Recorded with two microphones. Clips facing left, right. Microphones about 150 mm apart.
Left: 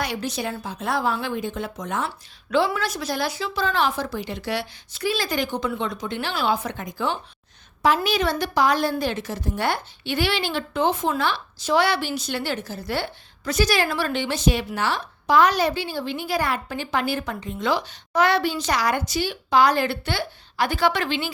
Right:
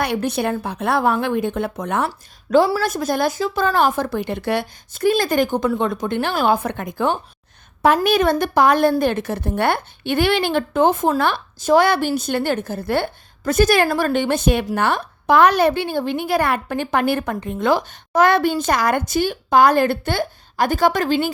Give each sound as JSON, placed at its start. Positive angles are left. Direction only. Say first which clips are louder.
{"t": 0.0, "sound": "a woman's voice", "louder": "right 7 dB", "side_deg": -60}
{"t": 2.0, "sound": "speech", "louder": "right 6 dB", "side_deg": -45}
{"t": 2.8, "sound": "speech", "louder": "right 6 dB", "side_deg": -50}